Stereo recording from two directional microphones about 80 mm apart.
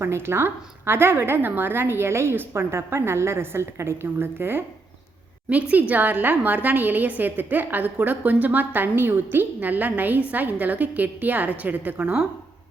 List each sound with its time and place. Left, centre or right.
0.0 s a woman's voice: right; by 12.2 s centre